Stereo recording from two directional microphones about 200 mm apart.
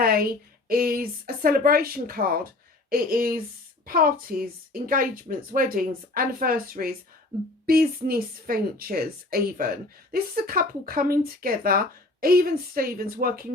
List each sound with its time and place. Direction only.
0.0 s speech: 50° right (ahead or behind)